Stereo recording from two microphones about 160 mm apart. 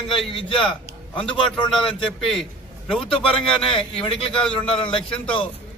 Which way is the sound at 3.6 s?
35° left (ahead or behind).